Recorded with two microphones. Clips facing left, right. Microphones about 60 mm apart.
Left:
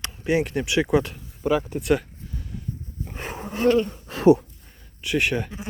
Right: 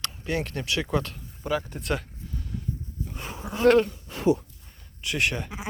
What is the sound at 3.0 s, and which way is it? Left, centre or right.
Livestock, left.